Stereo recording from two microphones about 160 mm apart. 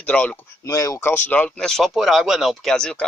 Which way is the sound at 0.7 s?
25° left (ahead or behind).